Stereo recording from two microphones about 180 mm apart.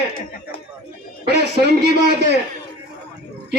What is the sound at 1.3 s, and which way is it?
Speech, 65° right (ahead or behind).